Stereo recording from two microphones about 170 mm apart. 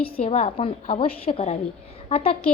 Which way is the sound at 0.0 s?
35° left (ahead or behind).